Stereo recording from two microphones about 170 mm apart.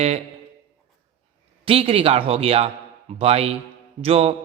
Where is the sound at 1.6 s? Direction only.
35° right (ahead or behind).